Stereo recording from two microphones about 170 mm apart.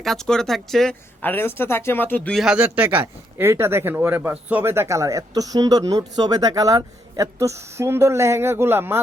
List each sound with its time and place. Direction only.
0.0 s speech: centre (ahead or behind)
2.4 s speech: 5° right (ahead or behind)